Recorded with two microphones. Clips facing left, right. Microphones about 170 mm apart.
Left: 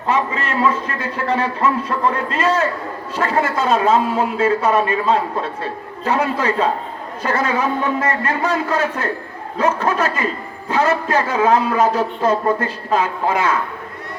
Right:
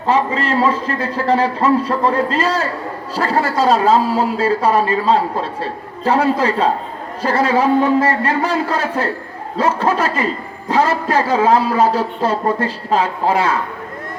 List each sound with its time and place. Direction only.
0.0 s speech: 30° right (ahead or behind)